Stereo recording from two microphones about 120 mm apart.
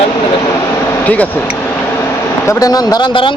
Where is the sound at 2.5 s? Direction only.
30° left (ahead or behind).